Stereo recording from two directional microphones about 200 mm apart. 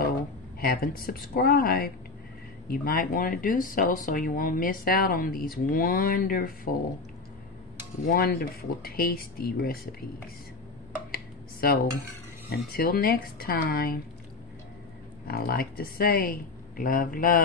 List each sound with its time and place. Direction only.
0.6 s speech: 50° left (ahead or behind)
8.1 s speech: 50° left (ahead or behind)
11.6 s speech: 50° left (ahead or behind)
15.2 s speech: 50° left (ahead or behind)